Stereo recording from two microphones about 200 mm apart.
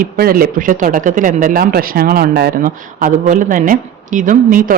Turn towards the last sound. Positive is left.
turn(degrees=-45)  # may be behind; listen again after turning